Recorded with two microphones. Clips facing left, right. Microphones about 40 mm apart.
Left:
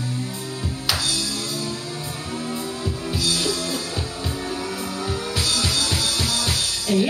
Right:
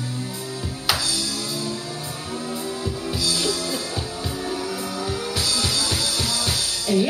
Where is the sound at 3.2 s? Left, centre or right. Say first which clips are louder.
Left 1 dB; left.